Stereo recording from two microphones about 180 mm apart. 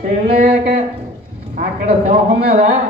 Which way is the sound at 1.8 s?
35° right (ahead or behind).